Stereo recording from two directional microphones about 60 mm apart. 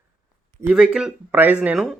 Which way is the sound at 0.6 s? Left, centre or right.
Centre.